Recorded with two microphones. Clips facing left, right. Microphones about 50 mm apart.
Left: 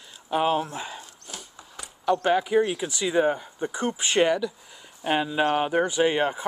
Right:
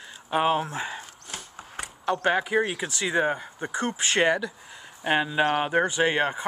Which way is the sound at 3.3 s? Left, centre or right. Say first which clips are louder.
Left 2 dB; right.